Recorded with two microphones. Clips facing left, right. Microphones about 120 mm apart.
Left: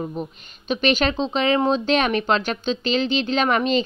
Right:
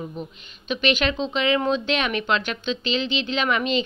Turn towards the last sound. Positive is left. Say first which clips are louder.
# left 3 dB
turn(degrees=40)  # may be behind; listen again after turning